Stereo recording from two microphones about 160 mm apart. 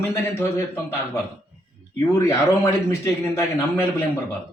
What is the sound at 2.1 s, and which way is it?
A man's voice, 20° left (ahead or behind).